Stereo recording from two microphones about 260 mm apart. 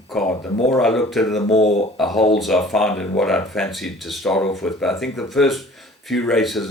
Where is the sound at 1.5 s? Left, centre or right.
Left.